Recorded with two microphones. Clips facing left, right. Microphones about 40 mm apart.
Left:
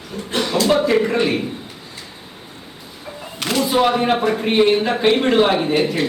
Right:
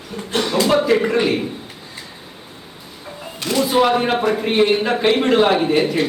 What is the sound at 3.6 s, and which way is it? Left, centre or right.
Speech, centre.